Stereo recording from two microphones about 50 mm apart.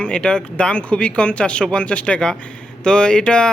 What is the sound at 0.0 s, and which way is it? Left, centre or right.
Speech, centre.